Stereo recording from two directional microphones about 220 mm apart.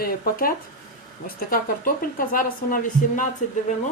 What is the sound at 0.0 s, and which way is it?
Speech, 40° left (ahead or behind).